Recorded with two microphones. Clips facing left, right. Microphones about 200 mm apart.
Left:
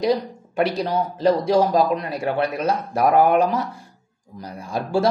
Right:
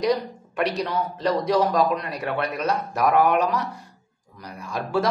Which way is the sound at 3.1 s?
45° left (ahead or behind).